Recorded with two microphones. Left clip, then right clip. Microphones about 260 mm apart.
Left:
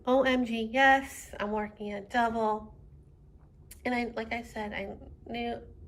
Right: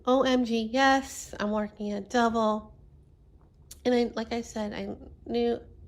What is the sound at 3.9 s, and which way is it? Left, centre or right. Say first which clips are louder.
A woman's voice: right 5 dB; right.